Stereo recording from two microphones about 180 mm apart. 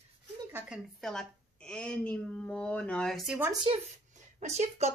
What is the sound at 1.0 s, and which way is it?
A woman's voice, 5° left (ahead or behind).